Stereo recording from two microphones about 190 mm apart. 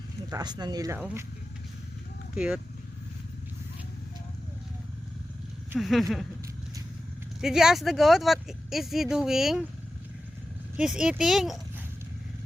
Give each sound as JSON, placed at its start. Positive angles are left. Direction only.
{"t": 0.3, "sound": "speech", "side_deg": -20}
{"t": 0.9, "sound": "speech", "side_deg": -5}
{"t": 2.3, "sound": "speech", "side_deg": -5}
{"t": 5.7, "sound": "speech", "side_deg": 0}
{"t": 7.4, "sound": "speech", "side_deg": -5}
{"t": 10.8, "sound": "speech", "side_deg": -5}